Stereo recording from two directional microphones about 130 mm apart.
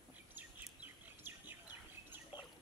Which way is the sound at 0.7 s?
15° right (ahead or behind).